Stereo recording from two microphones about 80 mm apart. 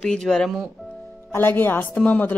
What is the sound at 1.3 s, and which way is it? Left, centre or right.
Speech, left.